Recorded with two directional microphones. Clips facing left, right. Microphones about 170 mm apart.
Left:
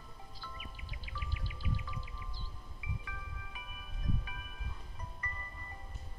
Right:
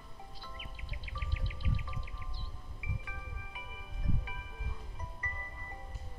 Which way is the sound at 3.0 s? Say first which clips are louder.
Even; 25° right (ahead or behind).